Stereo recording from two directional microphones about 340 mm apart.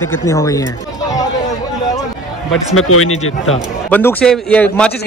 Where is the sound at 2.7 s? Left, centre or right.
Left.